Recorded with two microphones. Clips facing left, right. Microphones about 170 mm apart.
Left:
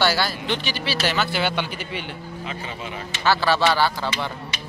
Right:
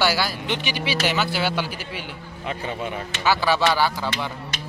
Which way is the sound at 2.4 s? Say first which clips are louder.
Right 6 dB; 50° right (ahead or behind).